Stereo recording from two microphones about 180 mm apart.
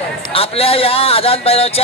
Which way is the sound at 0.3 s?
30° left (ahead or behind).